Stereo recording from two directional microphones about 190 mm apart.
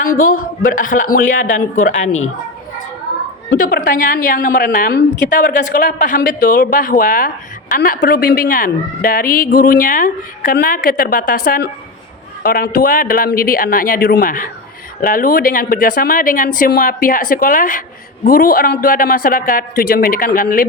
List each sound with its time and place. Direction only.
0.0 s a woman's voice: 45° left (ahead or behind)
3.6 s a woman's voice: 50° left (ahead or behind)